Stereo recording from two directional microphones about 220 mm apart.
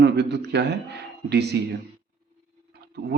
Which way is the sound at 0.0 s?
50° right (ahead or behind).